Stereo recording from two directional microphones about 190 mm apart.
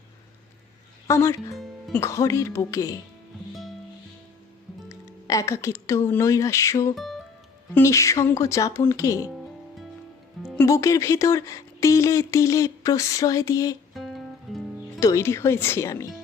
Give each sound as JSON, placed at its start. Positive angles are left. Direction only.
{"t": 1.0, "sound": "speech", "side_deg": 15}
{"t": 1.5, "sound": "music", "side_deg": 0}
{"t": 2.0, "sound": "speech", "side_deg": 15}
{"t": 3.5, "sound": "music", "side_deg": 0}
{"t": 4.9, "sound": "speech", "side_deg": 15}
{"t": 6.9, "sound": "speech", "side_deg": 0}
{"t": 7.7, "sound": "speech", "side_deg": 15}
{"t": 10.4, "sound": "music", "side_deg": 0}
{"t": 10.7, "sound": "speech", "side_deg": 15}
{"t": 13.9, "sound": "music", "side_deg": 0}
{"t": 15.0, "sound": "speech", "side_deg": 15}